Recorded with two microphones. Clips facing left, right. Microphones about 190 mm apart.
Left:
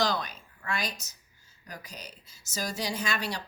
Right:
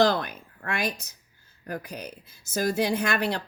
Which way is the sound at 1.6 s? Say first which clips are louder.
Right 10 dB; 55° right (ahead or behind).